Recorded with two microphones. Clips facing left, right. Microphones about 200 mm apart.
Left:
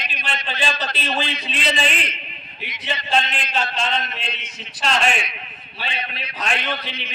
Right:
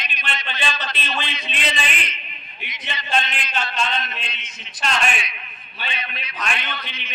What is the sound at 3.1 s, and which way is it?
Speech, 30° left (ahead or behind).